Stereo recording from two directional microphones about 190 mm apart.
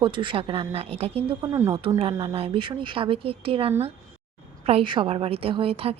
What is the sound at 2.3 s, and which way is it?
A woman's voice, 30° right (ahead or behind).